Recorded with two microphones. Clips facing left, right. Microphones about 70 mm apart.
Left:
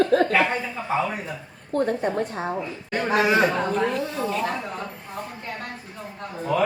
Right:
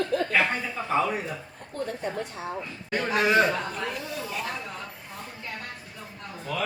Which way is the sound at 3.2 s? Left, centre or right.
Centre.